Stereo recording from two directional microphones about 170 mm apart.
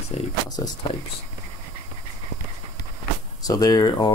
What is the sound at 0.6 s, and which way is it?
Speech, 20° left (ahead or behind).